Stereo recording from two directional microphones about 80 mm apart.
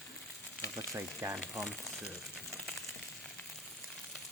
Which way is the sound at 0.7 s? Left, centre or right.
Right.